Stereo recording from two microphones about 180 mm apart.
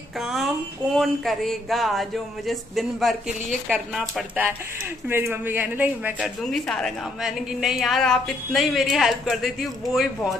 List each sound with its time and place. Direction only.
0.2 s speech: centre (ahead or behind)